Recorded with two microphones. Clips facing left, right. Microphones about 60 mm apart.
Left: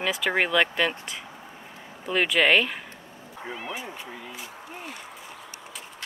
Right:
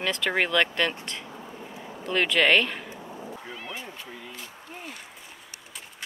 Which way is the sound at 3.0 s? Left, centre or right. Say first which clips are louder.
Right 7 dB; right.